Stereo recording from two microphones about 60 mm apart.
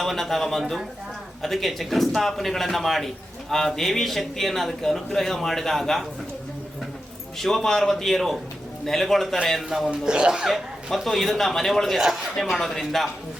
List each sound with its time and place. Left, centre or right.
0.0 s a man's voice: centre
7.3 s a man's voice: centre
10.1 s speech: centre
10.5 s a man's voice: centre
12.0 s a sound: centre
12.4 s a man's voice: centre